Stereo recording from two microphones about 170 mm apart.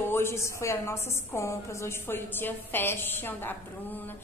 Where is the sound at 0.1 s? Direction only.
15° left (ahead or behind).